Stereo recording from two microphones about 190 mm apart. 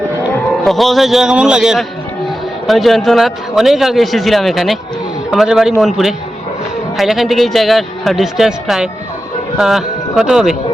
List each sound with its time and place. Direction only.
0.6 s a man's voice: centre (ahead or behind)